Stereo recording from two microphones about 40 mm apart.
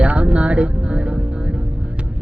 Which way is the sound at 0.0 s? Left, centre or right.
Right.